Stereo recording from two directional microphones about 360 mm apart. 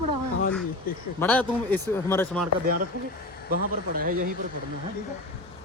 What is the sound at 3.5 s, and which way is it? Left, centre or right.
Speech, right.